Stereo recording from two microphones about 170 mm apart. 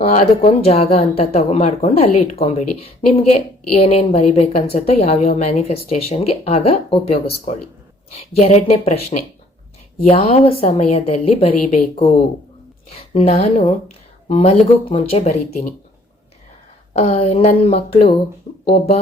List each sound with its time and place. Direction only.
0.0 s a woman's voice: 35° left (ahead or behind)
13.1 s a woman's voice: 35° left (ahead or behind)
17.1 s a woman's voice: 35° left (ahead or behind)